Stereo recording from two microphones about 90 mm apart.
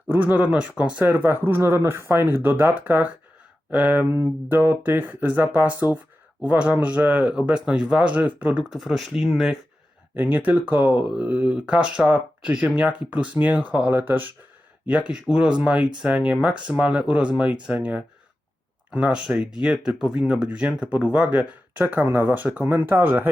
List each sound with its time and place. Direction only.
0.1 s speech: 20° right (ahead or behind)
8.7 s speech: 5° right (ahead or behind)
10.2 s speech: 20° right (ahead or behind)